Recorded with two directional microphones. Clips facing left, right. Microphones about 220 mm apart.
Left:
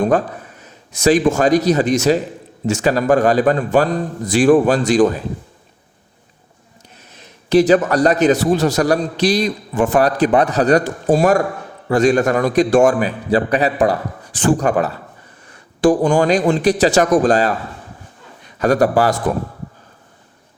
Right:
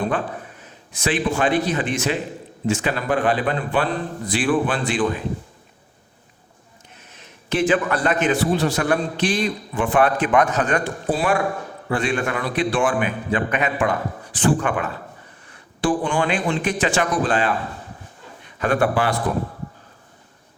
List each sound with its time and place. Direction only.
0.0 s a man's voice: 40° left (ahead or behind)
7.1 s a man's voice: 35° left (ahead or behind)
18.6 s a man's voice: 40° left (ahead or behind)